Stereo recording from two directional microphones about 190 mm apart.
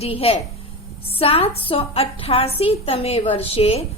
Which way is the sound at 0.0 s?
30° left (ahead or behind).